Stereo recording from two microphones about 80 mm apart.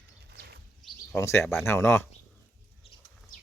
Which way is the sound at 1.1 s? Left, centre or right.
Left.